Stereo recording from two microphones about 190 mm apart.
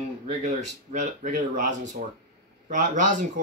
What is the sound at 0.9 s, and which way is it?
Speech, 40° right (ahead or behind).